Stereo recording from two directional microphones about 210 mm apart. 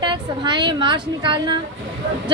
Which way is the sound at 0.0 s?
20° right (ahead or behind).